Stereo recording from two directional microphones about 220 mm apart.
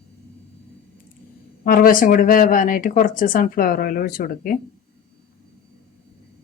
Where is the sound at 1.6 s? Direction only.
40° left (ahead or behind).